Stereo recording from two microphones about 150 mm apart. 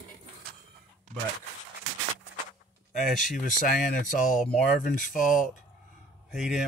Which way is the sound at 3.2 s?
65° left (ahead or behind).